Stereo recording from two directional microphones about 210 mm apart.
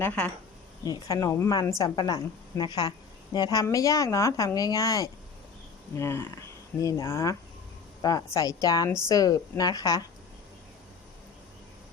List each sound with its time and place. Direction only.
0.0 s a woman's voice: 10° left (ahead or behind)